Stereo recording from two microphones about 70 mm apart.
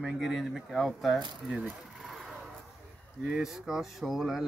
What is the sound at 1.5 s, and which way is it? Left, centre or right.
Speech, centre.